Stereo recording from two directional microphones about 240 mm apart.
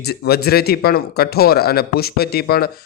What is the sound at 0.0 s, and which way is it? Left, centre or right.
Speech, left.